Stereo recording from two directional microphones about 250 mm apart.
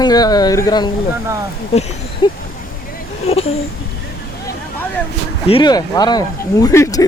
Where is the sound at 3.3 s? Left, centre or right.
Left.